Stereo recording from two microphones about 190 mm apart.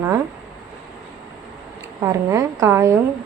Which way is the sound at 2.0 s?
15° right (ahead or behind).